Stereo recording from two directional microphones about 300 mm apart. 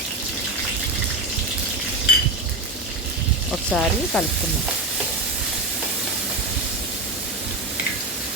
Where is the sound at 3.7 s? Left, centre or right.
Centre.